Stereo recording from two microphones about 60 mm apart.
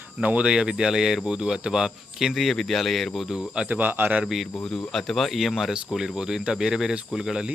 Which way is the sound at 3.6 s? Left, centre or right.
Right.